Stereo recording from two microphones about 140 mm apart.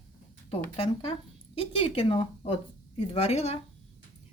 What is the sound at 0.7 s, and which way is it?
Speech, 40° left (ahead or behind).